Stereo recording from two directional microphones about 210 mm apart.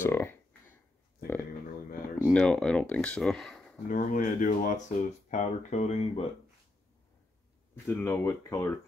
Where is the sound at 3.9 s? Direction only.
40° left (ahead or behind).